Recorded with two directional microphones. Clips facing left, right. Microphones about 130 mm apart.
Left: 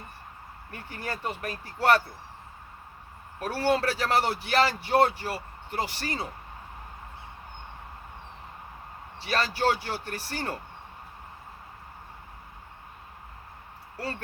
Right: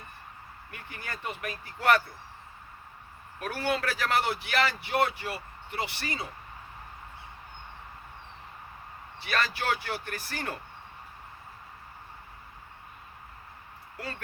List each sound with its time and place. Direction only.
0.7 s speech: 35° left (ahead or behind)
3.4 s speech: 30° left (ahead or behind)
9.2 s a man's voice: 30° left (ahead or behind)